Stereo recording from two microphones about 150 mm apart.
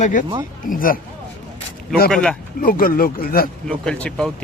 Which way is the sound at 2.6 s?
70° left (ahead or behind).